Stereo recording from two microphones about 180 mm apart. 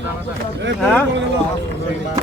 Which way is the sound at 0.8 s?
5° left (ahead or behind).